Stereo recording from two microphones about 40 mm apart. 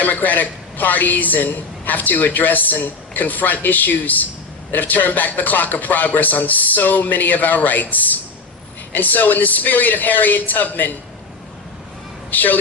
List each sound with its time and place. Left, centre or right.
0.0 s a woman's voice: left
12.3 s a woman's voice: left